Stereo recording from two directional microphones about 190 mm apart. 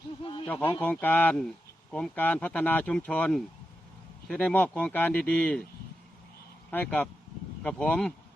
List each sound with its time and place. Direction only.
0.2 s speech: 25° left (ahead or behind)
0.4 s speech: 10° left (ahead or behind)
6.7 s speech: 10° left (ahead or behind)